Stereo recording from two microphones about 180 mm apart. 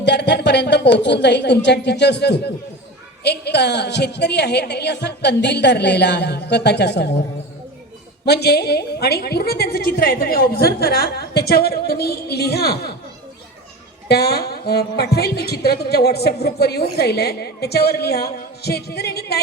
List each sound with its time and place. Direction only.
0.0 s a woman's voice: 75° left (ahead or behind)
8.2 s a woman's voice: 65° left (ahead or behind)
14.1 s a woman's voice: 65° left (ahead or behind)